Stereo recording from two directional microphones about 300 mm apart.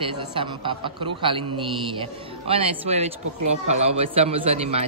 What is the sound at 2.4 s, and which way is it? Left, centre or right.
A man's voice, centre.